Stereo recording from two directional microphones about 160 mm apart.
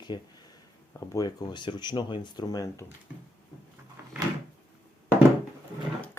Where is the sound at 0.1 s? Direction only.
25° left (ahead or behind).